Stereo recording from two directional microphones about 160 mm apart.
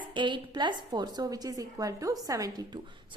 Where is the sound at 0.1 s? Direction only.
30° right (ahead or behind).